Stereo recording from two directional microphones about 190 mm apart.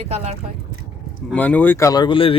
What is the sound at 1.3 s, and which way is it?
Speech, 10° left (ahead or behind).